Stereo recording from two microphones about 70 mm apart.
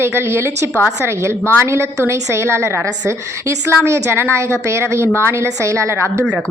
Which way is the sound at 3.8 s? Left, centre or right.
Right.